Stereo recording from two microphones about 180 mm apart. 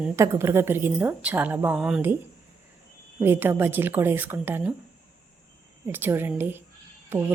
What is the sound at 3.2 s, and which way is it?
A woman's voice, 10° right (ahead or behind).